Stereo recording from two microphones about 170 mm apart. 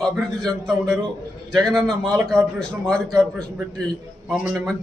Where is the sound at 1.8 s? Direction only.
20° right (ahead or behind).